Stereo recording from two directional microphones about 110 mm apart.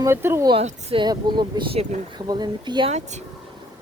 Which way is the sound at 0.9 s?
40° right (ahead or behind).